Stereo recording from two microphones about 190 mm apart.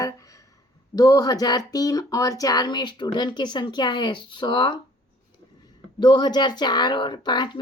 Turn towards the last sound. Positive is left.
turn(degrees=25)  # may be behind; listen again after turning